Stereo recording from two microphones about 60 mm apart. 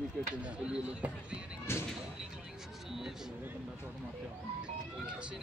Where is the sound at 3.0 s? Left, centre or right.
Centre.